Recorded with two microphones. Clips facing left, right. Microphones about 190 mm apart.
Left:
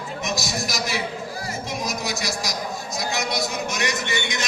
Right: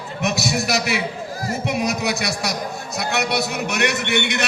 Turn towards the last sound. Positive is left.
turn(degrees=-65)  # may be behind; listen again after turning